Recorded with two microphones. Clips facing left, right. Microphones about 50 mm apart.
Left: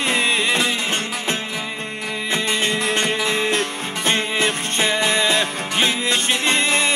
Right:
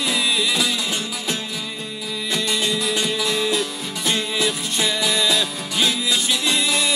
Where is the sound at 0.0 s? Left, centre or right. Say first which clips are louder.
Left 2 dB; left.